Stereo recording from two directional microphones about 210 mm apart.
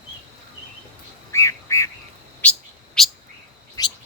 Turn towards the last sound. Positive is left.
turn(degrees=15)  # may be behind; listen again after turning